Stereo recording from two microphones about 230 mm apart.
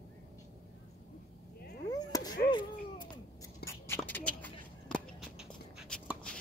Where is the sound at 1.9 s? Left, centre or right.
Centre.